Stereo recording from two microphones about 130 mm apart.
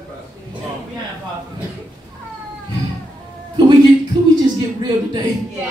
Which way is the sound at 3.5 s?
35° right (ahead or behind).